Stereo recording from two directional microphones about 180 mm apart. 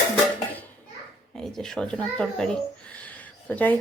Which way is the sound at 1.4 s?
Centre (ahead or behind).